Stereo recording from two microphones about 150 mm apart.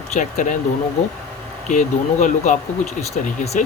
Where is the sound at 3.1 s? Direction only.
45° left (ahead or behind).